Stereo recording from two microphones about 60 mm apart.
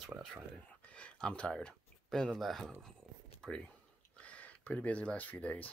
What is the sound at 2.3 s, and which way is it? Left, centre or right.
Speech, centre.